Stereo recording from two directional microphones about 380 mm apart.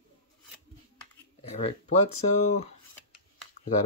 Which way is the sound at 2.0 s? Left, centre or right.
Left.